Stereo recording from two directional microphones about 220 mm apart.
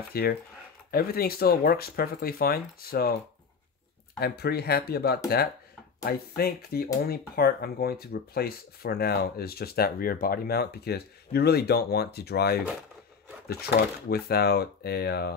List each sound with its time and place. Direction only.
0.1 s speech: 45° left (ahead or behind)
4.2 s speech: 45° left (ahead or behind)